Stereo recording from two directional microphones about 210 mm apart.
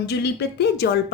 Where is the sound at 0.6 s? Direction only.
50° left (ahead or behind).